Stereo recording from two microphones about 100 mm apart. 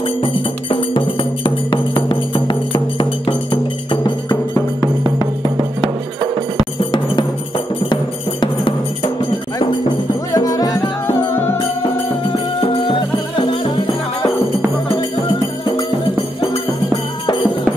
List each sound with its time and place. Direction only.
0.2 s music: 55° left (ahead or behind)
5.2 s music: 50° right (ahead or behind)
6.5 s music: 50° left (ahead or behind)
10.3 s music: 35° left (ahead or behind)